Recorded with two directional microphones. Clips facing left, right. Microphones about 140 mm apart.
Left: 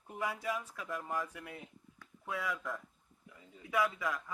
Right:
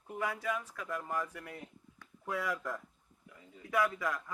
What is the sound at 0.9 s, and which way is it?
Speech, centre (ahead or behind).